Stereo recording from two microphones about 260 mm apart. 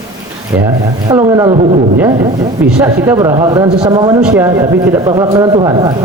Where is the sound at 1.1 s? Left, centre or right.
Centre.